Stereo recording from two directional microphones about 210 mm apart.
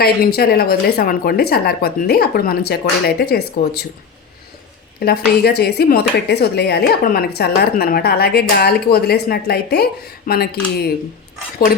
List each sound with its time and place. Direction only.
0.3 s speech: 45° left (ahead or behind)
5.0 s speech: 50° left (ahead or behind)